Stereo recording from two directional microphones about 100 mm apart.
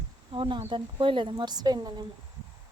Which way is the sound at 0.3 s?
60° right (ahead or behind).